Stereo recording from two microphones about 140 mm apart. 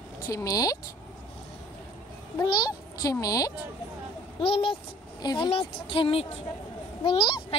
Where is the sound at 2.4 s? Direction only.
30° left (ahead or behind).